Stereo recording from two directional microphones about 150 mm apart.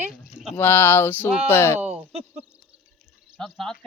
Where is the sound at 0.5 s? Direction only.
15° left (ahead or behind).